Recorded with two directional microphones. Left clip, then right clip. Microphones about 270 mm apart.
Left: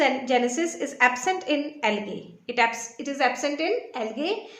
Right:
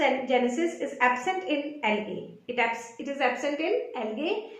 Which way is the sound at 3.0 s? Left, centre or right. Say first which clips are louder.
Left 3 dB; left.